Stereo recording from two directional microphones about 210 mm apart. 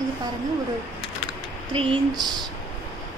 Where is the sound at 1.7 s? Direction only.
25° right (ahead or behind).